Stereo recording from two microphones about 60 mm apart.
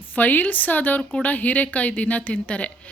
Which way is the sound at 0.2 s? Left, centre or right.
Left.